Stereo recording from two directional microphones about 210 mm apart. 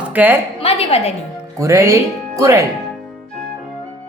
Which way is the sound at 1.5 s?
15° right (ahead or behind).